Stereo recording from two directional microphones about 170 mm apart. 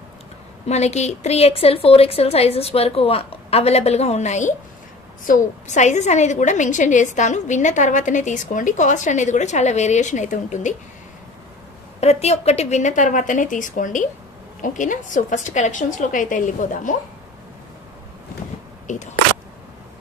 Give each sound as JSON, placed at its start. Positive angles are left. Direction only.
{"t": 0.7, "sound": "a woman's voice", "side_deg": 40}
{"t": 12.0, "sound": "a woman's voice", "side_deg": 40}
{"t": 18.9, "sound": "a woman's voice", "side_deg": 45}